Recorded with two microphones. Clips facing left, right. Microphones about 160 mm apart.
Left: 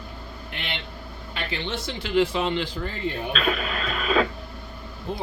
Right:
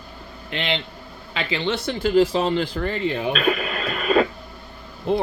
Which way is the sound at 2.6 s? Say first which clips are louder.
Right 5 dB; 65° right (ahead or behind).